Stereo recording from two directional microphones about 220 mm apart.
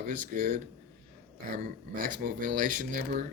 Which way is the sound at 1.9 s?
40° right (ahead or behind).